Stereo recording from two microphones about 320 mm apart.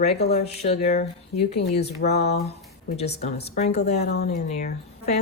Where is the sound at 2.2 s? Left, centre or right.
Left.